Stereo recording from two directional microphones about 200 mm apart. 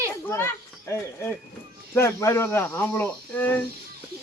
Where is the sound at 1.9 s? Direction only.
15° left (ahead or behind).